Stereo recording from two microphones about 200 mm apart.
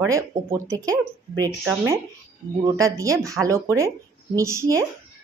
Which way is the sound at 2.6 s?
15° right (ahead or behind).